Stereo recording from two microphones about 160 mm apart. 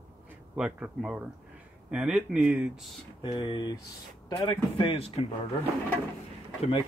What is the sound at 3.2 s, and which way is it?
Speech, 30° left (ahead or behind).